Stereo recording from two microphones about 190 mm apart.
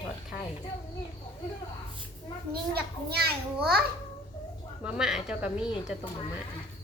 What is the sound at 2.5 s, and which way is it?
A child's voice, 55° right (ahead or behind).